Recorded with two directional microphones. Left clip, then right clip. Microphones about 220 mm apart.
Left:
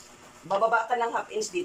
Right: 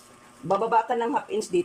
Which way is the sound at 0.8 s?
35° right (ahead or behind).